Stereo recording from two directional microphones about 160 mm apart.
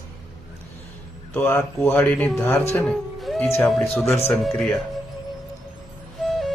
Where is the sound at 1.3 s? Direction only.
15° left (ahead or behind).